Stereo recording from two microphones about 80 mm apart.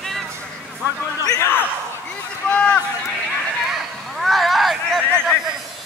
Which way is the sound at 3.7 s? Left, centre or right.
Centre.